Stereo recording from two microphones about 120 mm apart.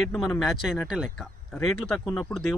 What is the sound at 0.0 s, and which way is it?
Speech, centre (ahead or behind).